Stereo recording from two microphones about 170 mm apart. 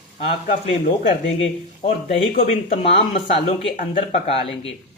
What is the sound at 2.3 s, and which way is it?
Speech, 35° left (ahead or behind).